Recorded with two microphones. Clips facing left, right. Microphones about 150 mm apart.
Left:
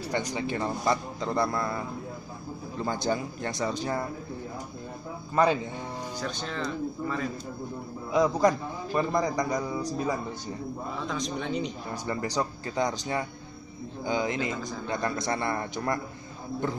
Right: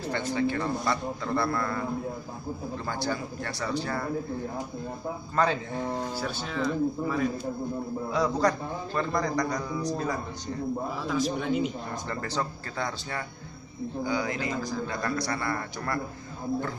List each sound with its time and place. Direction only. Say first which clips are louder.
0.0 s a man's voice: right 3 dB; 15° left (ahead or behind)
2.8 s speech: left 5 dB; 20° left (ahead or behind)
5.3 s a man's voice: left 3 dB; 10° left (ahead or behind)
6.1 s speech: right 2 dB; 5° right (ahead or behind)
8.1 s a man's voice: left 3 dB; 15° left (ahead or behind)
11.1 s speech: right 5 dB; 5° right (ahead or behind)
11.9 s a man's voice: left 2 dB; 15° left (ahead or behind)